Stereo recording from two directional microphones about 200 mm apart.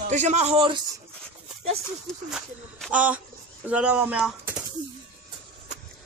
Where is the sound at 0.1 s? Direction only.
35° right (ahead or behind).